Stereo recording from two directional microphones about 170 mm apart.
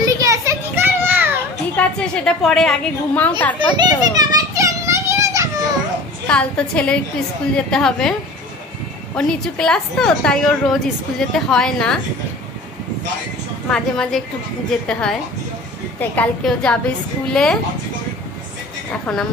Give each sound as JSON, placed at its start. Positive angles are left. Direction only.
{"t": 0.0, "sound": "children playing", "side_deg": -20}
{"t": 1.8, "sound": "a woman's voice", "side_deg": 5}
{"t": 3.5, "sound": "children playing", "side_deg": -25}
{"t": 6.2, "sound": "a woman's voice", "side_deg": 5}
{"t": 9.1, "sound": "a woman's voice", "side_deg": 5}
{"t": 13.7, "sound": "a woman's voice", "side_deg": 5}
{"t": 19.1, "sound": "a woman's voice", "side_deg": 5}